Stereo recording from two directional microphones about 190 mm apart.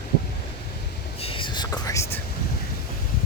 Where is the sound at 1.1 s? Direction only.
30° left (ahead or behind).